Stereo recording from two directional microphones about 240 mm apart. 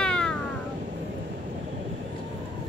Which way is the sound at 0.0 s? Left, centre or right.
Centre.